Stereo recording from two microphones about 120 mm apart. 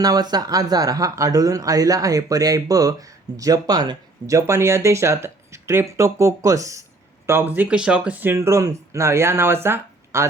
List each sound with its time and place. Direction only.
0.0 s speech: 35° right (ahead or behind)
7.3 s speech: 15° right (ahead or behind)
9.6 s a sound: 20° right (ahead or behind)